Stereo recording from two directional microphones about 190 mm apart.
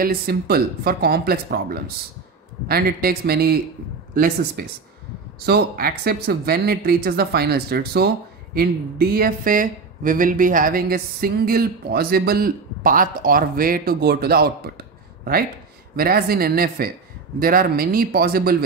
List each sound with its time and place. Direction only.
0.0 s speech: 55° right (ahead or behind)
16.0 s speech: 50° right (ahead or behind)